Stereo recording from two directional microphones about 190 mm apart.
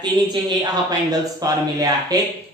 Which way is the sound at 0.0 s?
20° right (ahead or behind).